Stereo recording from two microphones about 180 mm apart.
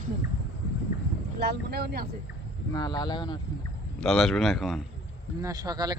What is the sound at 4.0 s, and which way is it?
Speech, centre (ahead or behind).